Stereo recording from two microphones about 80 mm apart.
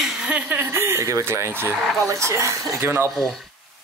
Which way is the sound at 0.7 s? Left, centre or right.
Right.